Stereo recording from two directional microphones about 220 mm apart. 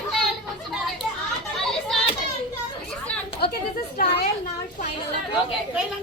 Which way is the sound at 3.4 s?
45° left (ahead or behind).